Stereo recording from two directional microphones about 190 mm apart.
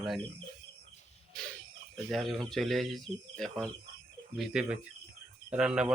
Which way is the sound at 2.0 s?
Centre (ahead or behind).